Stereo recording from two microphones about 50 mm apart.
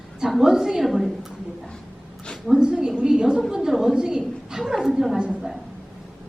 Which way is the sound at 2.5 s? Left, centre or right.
Centre.